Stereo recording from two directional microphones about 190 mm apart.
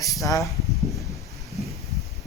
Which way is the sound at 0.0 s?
15° left (ahead or behind).